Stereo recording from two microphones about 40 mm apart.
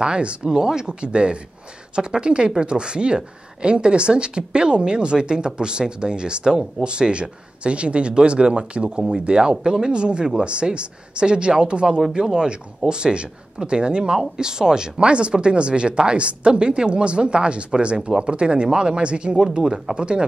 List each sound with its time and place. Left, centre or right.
0.0 s speech: right
0.5 s speech: centre
19.3 s speech: centre